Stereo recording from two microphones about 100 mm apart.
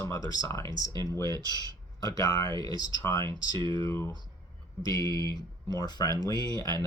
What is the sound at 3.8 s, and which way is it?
Speech, 25° left (ahead or behind).